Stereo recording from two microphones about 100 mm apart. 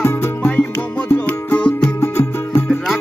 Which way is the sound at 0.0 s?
25° left (ahead or behind).